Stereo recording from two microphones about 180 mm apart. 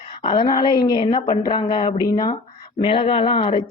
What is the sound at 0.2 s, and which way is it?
Speech, 25° left (ahead or behind).